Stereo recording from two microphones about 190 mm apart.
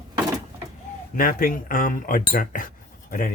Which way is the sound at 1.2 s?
50° left (ahead or behind).